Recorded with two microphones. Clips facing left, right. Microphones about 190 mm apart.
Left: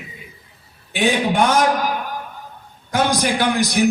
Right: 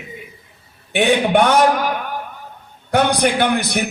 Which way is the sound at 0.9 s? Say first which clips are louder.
Right 4 dB; 65° right (ahead or behind).